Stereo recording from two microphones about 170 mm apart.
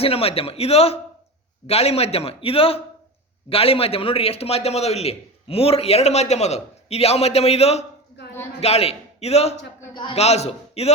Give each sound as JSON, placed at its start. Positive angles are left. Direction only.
{"t": 0.0, "sound": "a man's voice", "side_deg": 35}
{"t": 8.2, "sound": "a sound", "side_deg": 90}
{"t": 8.6, "sound": "a man's voice", "side_deg": 35}